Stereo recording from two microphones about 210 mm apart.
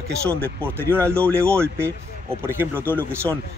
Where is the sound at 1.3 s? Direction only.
10° right (ahead or behind).